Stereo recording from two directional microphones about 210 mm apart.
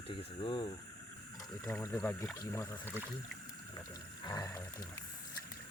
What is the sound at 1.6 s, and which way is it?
Speech, 10° left (ahead or behind).